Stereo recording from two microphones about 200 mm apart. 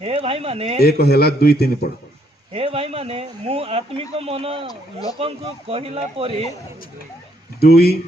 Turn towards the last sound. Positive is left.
turn(degrees=50)  # may be behind; listen again after turning